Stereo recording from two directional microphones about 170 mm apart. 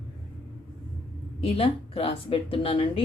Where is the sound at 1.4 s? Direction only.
35° left (ahead or behind).